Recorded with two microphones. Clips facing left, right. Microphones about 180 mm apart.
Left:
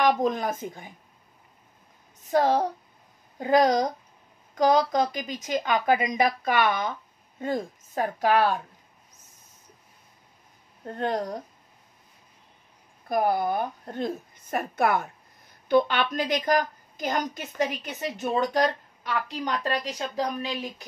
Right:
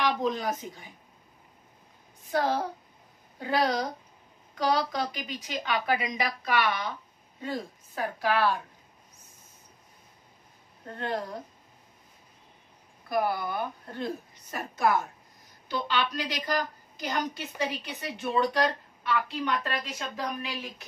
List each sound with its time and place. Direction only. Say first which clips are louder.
0.0 s a woman's voice: left 5 dB; 50° left (ahead or behind)
2.3 s a woman's voice: left 5 dB; 45° left (ahead or behind)
11.0 s speech: left 5 dB; 40° left (ahead or behind)
13.1 s a woman's voice: left 4 dB; 45° left (ahead or behind)